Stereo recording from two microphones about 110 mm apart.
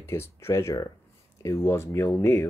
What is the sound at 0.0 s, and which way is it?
Speech, 25° left (ahead or behind).